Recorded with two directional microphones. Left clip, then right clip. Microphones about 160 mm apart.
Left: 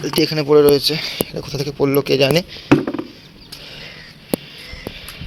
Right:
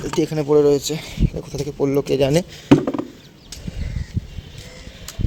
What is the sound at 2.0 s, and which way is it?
Speech, 15° right (ahead or behind).